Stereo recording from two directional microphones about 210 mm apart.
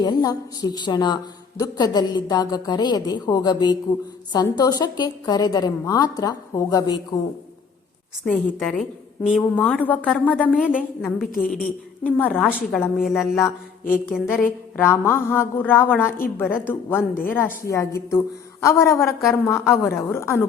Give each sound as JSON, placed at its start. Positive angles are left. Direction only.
{"t": 0.0, "sound": "a woman's voice", "side_deg": 20}
{"t": 8.3, "sound": "a woman's voice", "side_deg": 5}
{"t": 10.5, "sound": "a woman's voice", "side_deg": -5}
{"t": 11.3, "sound": "a woman's voice", "side_deg": 40}
{"t": 12.0, "sound": "a woman's voice", "side_deg": 10}